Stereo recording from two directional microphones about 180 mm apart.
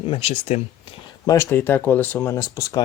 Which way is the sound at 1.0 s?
20° left (ahead or behind).